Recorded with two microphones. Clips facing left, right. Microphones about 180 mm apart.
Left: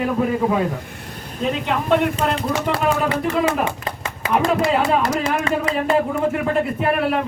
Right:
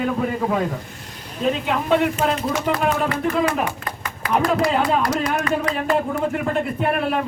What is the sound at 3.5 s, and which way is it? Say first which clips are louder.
Speech: left 2 dB; 25° left (ahead or behind).